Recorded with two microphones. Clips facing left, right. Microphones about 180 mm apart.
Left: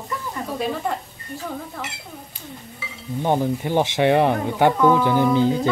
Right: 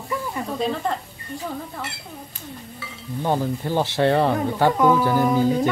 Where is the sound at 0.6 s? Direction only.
5° left (ahead or behind).